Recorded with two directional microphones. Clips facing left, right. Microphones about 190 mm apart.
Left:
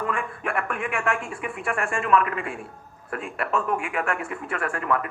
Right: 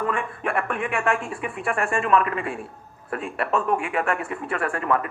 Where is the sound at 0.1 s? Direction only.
30° right (ahead or behind).